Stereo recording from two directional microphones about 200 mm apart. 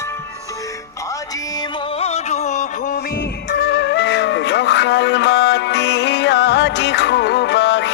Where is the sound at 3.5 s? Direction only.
60° left (ahead or behind).